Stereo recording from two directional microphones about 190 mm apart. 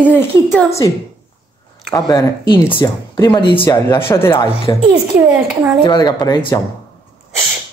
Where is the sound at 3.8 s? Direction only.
15° left (ahead or behind).